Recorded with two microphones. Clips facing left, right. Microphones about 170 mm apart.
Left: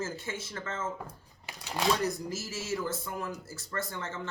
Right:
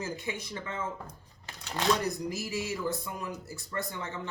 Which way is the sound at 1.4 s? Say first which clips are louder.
Left 1 dB; 10° left (ahead or behind).